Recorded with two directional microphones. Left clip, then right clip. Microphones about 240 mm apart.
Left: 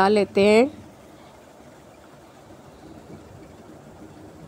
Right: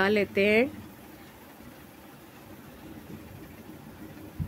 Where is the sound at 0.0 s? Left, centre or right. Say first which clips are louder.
Left 6 dB; centre.